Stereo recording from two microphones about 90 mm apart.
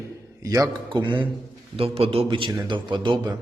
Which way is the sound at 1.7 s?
90° right.